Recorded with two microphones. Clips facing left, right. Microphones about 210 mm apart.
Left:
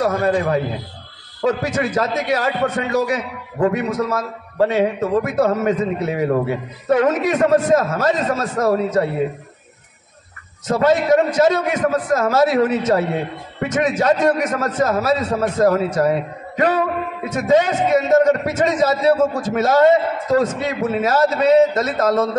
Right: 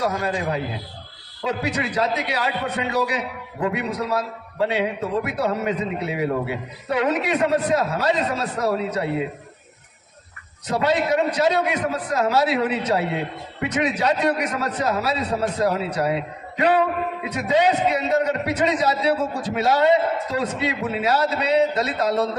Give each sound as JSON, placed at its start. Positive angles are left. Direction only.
{"t": 0.1, "sound": "a man's voice", "side_deg": 60}
{"t": 1.4, "sound": "a man's voice", "side_deg": 45}
{"t": 10.7, "sound": "a man's voice", "side_deg": 45}